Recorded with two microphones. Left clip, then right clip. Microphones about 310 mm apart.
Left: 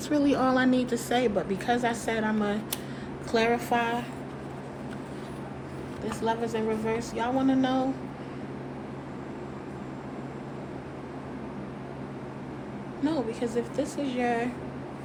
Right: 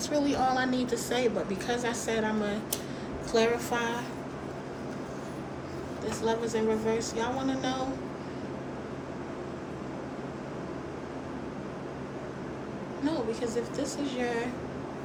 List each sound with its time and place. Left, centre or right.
0.1 s a woman's voice: left
6.1 s a woman's voice: left
13.1 s a woman's voice: left